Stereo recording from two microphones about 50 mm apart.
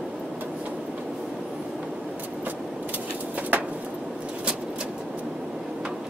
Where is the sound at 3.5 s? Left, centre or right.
Right.